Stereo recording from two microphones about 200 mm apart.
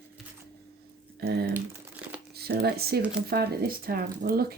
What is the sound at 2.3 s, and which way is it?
Speech, 50° right (ahead or behind).